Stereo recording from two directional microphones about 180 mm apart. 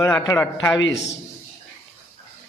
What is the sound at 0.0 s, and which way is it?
Speech, 15° left (ahead or behind).